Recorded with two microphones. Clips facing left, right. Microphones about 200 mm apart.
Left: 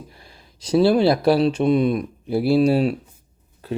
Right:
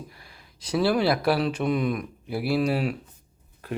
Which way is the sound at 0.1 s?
25° left (ahead or behind).